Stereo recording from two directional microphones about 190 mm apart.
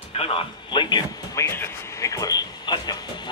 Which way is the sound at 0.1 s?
30° left (ahead or behind).